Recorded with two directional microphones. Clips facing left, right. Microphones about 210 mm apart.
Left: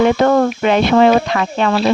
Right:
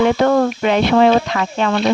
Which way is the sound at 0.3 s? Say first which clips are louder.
Left 1 dB; 55° left (ahead or behind).